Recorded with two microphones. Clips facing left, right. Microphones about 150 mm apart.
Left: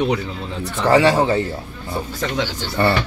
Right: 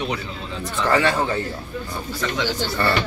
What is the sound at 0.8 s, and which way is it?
Speech, 25° left (ahead or behind).